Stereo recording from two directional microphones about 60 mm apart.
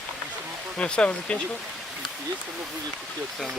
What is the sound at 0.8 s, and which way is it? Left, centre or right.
Speech, centre.